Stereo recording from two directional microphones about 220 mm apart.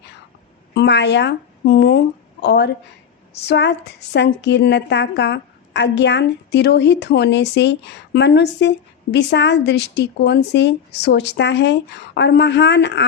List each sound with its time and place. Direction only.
0.7 s a woman's voice: 50° left (ahead or behind)